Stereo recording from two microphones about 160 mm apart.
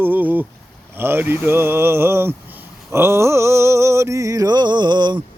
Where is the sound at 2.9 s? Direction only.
15° right (ahead or behind).